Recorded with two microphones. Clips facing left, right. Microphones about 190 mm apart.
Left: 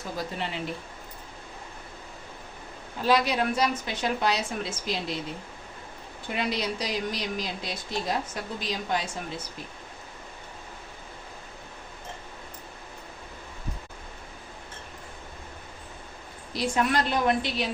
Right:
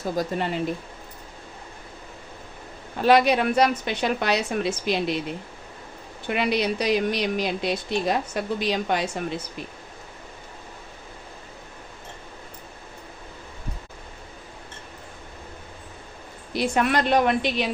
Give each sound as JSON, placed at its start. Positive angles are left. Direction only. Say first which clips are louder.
{"t": 0.0, "sound": "speech", "louder": "right 7 dB", "side_deg": -45}
{"t": 3.0, "sound": "a woman's voice", "louder": "right 6 dB", "side_deg": -65}
{"t": 6.2, "sound": "a woman's voice", "louder": "right 6 dB", "side_deg": -65}
{"t": 16.6, "sound": "a woman's voice", "louder": "right 3 dB", "side_deg": -65}